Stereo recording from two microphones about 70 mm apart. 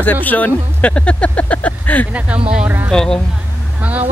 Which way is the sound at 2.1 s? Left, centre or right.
Centre.